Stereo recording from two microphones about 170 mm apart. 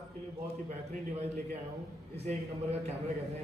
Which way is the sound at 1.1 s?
40° right (ahead or behind).